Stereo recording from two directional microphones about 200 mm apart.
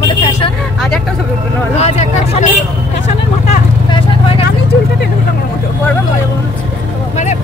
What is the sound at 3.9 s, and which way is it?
Vehicle, 25° left (ahead or behind).